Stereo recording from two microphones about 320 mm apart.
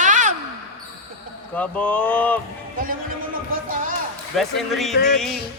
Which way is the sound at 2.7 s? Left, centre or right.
Right.